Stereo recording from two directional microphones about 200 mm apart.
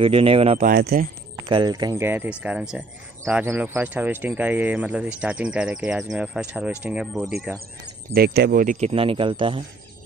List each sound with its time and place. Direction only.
0.0 s speech: 25° right (ahead or behind)
0.7 s speech: 50° right (ahead or behind)
1.5 s speech: 20° right (ahead or behind); by 7.3 s 5° right (ahead or behind)
7.8 s speech: 50° right (ahead or behind); by 9.6 s 25° right (ahead or behind)